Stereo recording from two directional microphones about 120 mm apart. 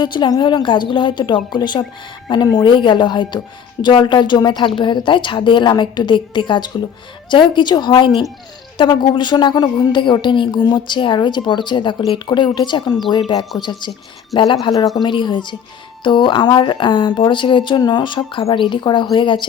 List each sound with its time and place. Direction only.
0.0 s speech: 40° left (ahead or behind)